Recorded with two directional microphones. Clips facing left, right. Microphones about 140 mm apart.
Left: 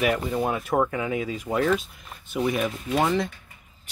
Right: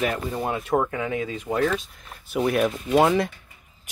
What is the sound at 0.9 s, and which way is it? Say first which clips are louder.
Speech: even; 10° left (ahead or behind).